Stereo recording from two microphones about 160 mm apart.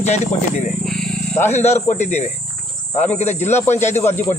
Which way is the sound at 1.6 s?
45° left (ahead or behind).